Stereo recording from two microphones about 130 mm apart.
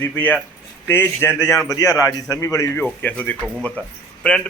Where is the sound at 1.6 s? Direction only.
30° left (ahead or behind).